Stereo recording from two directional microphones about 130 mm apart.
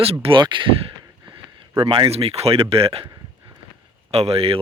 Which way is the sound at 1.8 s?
45° right (ahead or behind).